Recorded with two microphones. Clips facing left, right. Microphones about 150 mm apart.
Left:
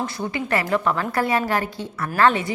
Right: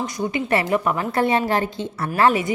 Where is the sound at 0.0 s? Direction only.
20° right (ahead or behind).